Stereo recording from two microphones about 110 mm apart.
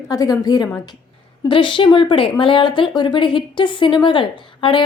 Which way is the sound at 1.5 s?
50° left (ahead or behind).